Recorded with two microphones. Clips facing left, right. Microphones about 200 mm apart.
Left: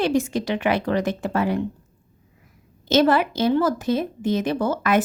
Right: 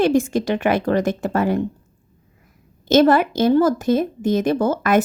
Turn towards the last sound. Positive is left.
turn(degrees=-45)  # may be behind; listen again after turning